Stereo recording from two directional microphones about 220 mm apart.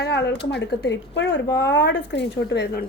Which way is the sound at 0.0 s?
50° left (ahead or behind).